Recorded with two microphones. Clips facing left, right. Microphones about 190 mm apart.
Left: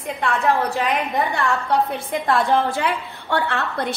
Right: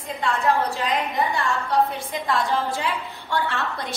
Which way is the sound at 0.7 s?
65° left (ahead or behind).